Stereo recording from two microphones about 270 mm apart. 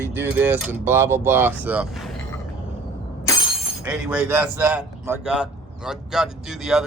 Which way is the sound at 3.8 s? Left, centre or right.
Centre.